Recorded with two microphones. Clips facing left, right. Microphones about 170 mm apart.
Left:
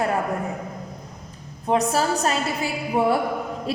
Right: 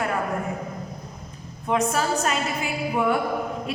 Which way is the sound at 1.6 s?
35° left (ahead or behind).